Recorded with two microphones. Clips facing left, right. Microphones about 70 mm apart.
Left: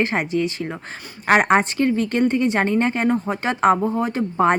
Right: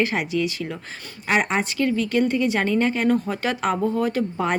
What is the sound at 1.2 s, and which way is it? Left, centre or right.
Speech, left.